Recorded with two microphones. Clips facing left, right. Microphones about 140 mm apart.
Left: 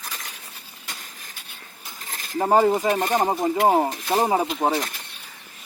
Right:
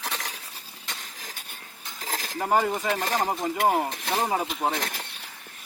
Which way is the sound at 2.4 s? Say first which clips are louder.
Left 6 dB; 30° left (ahead or behind).